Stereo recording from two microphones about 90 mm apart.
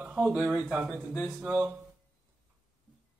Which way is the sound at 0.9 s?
10° left (ahead or behind).